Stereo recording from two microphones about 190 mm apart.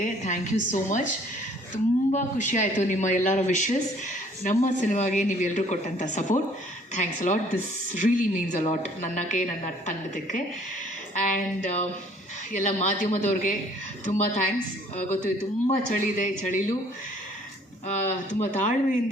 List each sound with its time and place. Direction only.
0.0 s speech: 40° left (ahead or behind)
11.1 s speech: 40° left (ahead or behind)
15.6 s a man's voice: 45° left (ahead or behind)
17.8 s speech: 40° left (ahead or behind)